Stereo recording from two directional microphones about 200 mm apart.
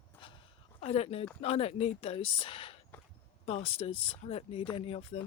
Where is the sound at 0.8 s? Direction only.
30° left (ahead or behind).